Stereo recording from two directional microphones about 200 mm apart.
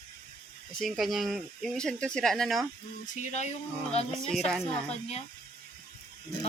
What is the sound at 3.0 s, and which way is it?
Speech, 35° left (ahead or behind).